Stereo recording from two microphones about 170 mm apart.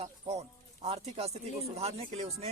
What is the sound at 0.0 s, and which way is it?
Speech, 40° right (ahead or behind).